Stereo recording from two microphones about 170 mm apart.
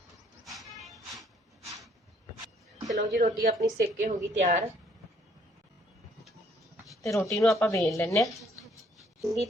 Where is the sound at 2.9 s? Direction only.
50° right (ahead or behind).